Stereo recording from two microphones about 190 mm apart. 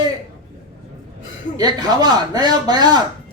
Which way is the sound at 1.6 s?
20° right (ahead or behind).